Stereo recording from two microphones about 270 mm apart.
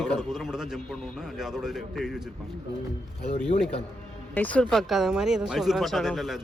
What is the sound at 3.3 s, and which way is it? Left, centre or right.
Speech, left.